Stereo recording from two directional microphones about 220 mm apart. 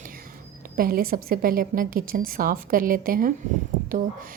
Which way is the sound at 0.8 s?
40° right (ahead or behind).